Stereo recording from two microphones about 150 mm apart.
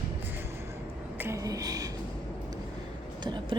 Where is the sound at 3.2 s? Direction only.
30° right (ahead or behind).